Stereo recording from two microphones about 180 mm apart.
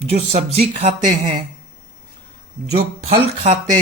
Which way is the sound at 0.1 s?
35° right (ahead or behind).